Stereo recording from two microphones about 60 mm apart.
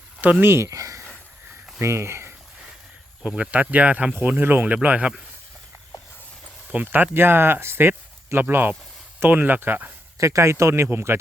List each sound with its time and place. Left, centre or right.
0.2 s speech: right
0.4 s speech: right
0.7 s a sound: right
1.8 s speech: right
3.2 s speech: centre
6.7 s speech: right
10.2 s speech: right